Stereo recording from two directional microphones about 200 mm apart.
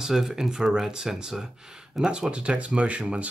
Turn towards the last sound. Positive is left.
turn(degrees=-5)  # may be behind; listen again after turning